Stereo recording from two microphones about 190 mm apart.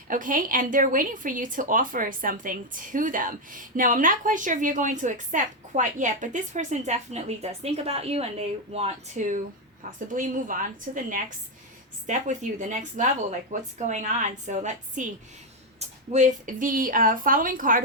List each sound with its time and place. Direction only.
0.1 s a woman's voice: 45° right (ahead or behind)